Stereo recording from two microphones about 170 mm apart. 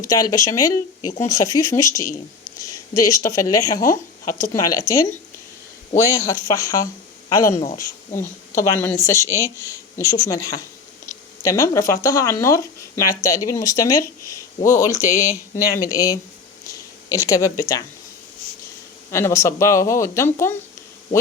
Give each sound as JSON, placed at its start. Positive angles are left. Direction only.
{"t": 0.0, "sound": "speech", "side_deg": 20}
{"t": 16.6, "sound": "a sound", "side_deg": 20}
{"t": 19.1, "sound": "speech", "side_deg": 15}